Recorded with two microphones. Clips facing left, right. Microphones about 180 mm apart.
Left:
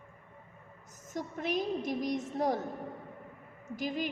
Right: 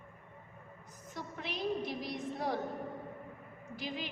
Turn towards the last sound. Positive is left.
turn(degrees=45)  # may be behind; listen again after turning